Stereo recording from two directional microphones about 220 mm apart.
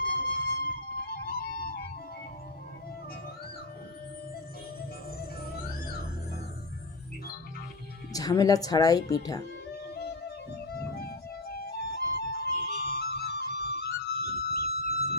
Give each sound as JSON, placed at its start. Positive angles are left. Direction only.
{"t": 0.0, "sound": "music", "side_deg": 40}
{"t": 8.1, "sound": "speech", "side_deg": 15}
{"t": 9.9, "sound": "music", "side_deg": 45}